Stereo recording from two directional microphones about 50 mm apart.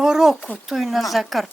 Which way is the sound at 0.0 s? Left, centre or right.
Centre.